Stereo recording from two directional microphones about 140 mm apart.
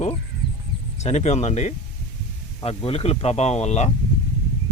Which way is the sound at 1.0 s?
55° left (ahead or behind).